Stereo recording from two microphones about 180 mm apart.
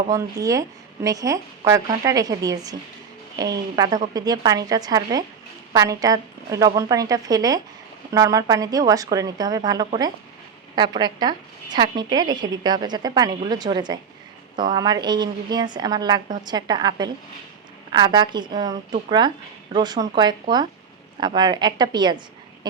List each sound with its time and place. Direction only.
0.1 s a woman's voice: 20° right (ahead or behind)